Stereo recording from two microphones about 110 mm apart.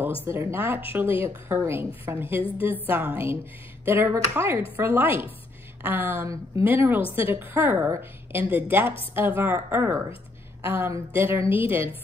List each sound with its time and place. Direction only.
0.2 s a woman's voice: 25° right (ahead or behind)
6.2 s a woman's voice: 30° right (ahead or behind)
6.6 s a woman's voice: 20° right (ahead or behind)